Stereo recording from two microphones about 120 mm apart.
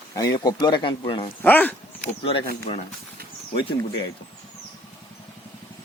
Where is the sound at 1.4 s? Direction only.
15° left (ahead or behind).